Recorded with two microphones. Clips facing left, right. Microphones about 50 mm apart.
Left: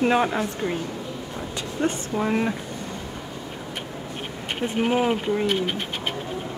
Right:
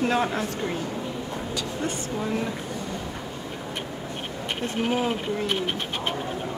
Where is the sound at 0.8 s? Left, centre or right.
Right.